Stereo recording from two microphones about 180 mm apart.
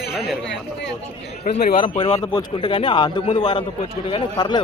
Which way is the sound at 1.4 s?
55° left (ahead or behind).